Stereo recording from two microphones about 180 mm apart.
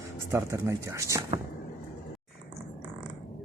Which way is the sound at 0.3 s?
15° right (ahead or behind).